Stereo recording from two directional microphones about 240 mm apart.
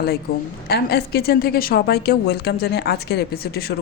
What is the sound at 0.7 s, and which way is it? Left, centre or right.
A woman's voice, left.